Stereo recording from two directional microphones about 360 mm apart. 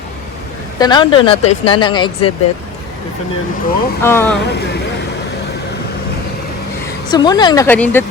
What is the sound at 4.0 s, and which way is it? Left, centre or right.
Speech, centre.